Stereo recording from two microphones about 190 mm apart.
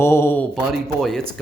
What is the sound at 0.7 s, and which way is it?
Speech, centre (ahead or behind).